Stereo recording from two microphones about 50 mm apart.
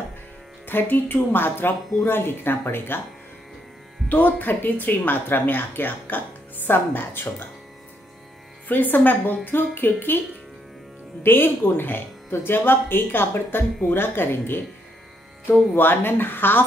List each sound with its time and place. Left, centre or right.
0.7 s speech: left
4.1 s a woman's voice: left
8.6 s a woman's voice: left
11.2 s speech: left